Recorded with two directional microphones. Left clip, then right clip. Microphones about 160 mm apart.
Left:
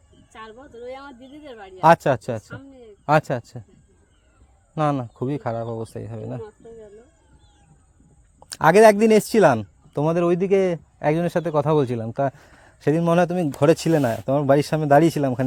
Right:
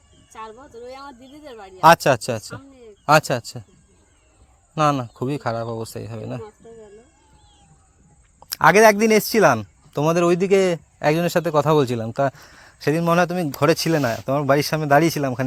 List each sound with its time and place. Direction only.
1.4 s speech: 25° left (ahead or behind)
1.8 s speech: 10° left (ahead or behind)
4.7 s speech: 5° left (ahead or behind)
8.4 s speech: 30° left (ahead or behind)
9.9 s speech: 5° left (ahead or behind)
12.3 s speech: 15° left (ahead or behind); by 14.0 s 30° left (ahead or behind)
14.0 s speech: 20° left (ahead or behind)